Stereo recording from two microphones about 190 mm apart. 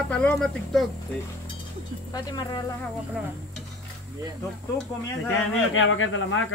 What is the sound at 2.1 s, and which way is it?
Speech, 20° left (ahead or behind).